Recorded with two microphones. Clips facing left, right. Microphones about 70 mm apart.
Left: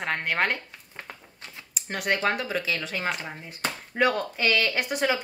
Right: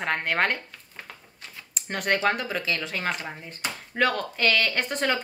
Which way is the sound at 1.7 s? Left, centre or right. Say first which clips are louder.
Right 1 dB; centre.